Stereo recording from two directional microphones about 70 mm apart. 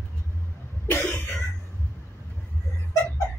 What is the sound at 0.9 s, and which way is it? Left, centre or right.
Cough, left.